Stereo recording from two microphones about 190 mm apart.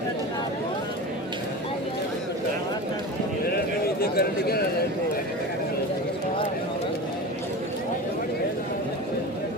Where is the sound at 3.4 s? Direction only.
55° left (ahead or behind).